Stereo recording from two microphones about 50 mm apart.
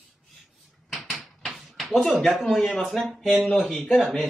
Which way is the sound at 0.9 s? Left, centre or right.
Centre.